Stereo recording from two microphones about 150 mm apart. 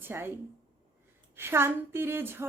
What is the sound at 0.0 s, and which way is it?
Speech, 15° right (ahead or behind).